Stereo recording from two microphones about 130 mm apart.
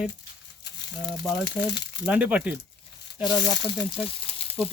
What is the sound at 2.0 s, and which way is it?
Speech, 10° right (ahead or behind).